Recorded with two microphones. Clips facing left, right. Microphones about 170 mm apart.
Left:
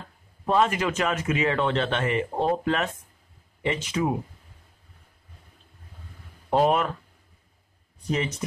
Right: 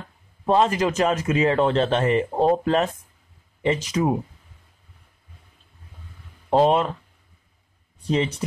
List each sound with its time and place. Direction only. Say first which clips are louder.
0.5 s speech: right 3 dB; 30° right (ahead or behind)
6.5 s speech: right 3 dB; 25° right (ahead or behind)
8.1 s speech: right 4 dB; 30° right (ahead or behind)